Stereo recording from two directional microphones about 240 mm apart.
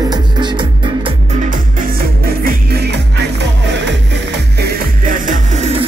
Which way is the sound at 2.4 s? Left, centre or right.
Right.